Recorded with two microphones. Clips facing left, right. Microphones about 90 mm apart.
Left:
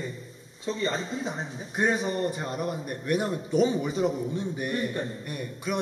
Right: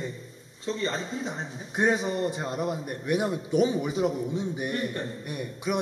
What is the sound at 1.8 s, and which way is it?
A man's voice, 15° right (ahead or behind).